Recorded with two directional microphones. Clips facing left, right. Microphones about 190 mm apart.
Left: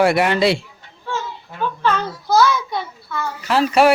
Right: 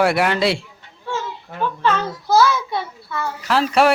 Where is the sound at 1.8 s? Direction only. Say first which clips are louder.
Even; centre (ahead or behind).